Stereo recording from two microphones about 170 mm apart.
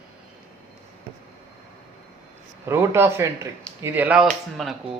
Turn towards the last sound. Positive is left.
turn(degrees=0)  # may be behind; listen again after turning